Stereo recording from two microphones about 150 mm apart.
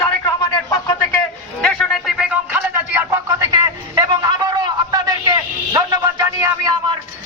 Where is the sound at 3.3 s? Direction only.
25° right (ahead or behind).